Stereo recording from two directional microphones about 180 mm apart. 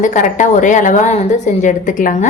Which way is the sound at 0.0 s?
45° left (ahead or behind).